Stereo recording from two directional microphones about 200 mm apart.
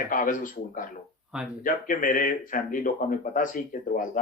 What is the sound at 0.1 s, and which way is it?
Speech, 40° left (ahead or behind).